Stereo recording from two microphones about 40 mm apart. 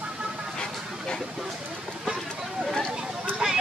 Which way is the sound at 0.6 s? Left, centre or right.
Centre.